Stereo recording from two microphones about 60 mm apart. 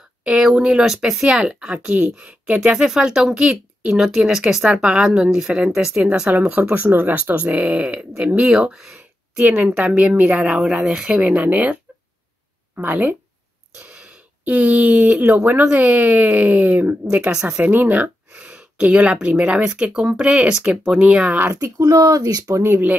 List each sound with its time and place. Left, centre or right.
0.2 s speech: centre
3.9 s speech: centre
6.3 s speech: right; by 9.0 s centre
9.4 s speech: right; by 11.1 s centre
11.1 s speech: centre
13.7 s speech: centre
15.2 s speech: right
15.7 s speech: right
17.1 s a woman's voice: centre
20.8 s speech: centre
21.1 s speech: centre
21.4 s speech: right
21.6 s speech: right
22.6 s speech: right